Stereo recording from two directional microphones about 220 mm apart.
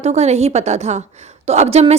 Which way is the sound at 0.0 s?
30° right (ahead or behind).